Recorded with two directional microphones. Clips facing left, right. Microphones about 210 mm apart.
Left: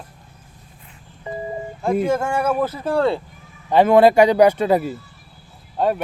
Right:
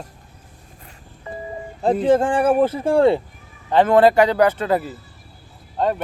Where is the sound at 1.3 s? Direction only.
20° left (ahead or behind).